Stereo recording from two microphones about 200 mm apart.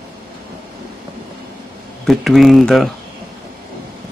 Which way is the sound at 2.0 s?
Centre (ahead or behind).